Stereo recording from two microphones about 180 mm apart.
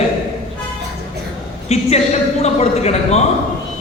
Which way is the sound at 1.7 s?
35° left (ahead or behind).